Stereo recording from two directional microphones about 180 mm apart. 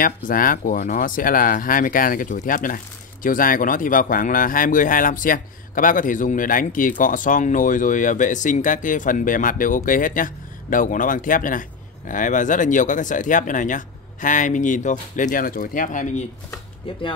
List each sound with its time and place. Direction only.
0.0 s speech: 50° left (ahead or behind)